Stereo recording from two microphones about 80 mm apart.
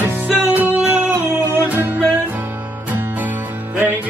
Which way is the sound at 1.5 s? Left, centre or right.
Right.